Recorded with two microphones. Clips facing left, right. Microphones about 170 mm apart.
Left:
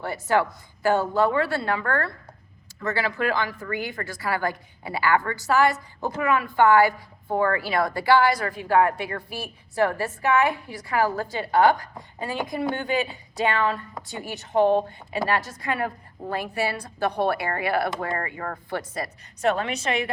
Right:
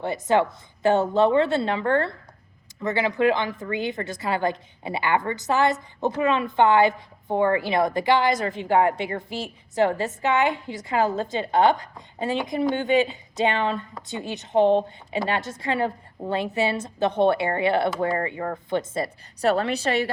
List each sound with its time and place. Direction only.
0.0 s a woman's voice: 20° right (ahead or behind)